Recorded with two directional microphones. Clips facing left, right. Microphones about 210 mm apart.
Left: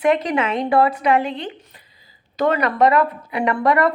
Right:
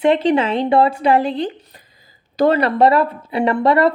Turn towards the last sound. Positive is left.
turn(degrees=-25)  # may be behind; listen again after turning